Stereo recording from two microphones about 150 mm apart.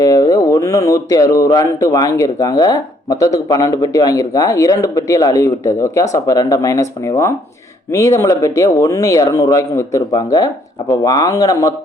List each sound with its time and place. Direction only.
0.0 s speech: 25° left (ahead or behind)